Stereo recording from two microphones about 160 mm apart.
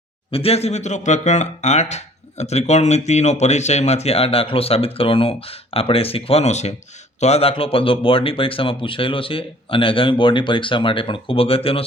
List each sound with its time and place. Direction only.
0.3 s speech: 35° left (ahead or behind)